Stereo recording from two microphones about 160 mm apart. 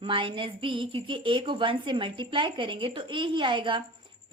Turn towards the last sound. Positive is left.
turn(degrees=-30)  # may be behind; listen again after turning